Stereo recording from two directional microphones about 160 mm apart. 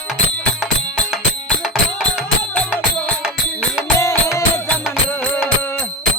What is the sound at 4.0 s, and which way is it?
Music, 20° left (ahead or behind).